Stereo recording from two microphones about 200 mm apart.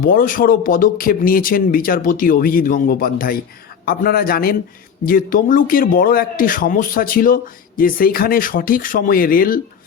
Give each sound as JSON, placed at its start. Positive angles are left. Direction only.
{"t": 0.0, "sound": "a man's voice", "side_deg": 45}